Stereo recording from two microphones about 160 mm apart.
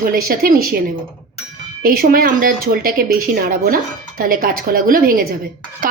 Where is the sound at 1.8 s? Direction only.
65° right (ahead or behind).